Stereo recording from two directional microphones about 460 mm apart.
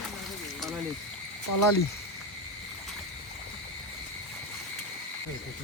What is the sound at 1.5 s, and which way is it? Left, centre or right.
Speech, left.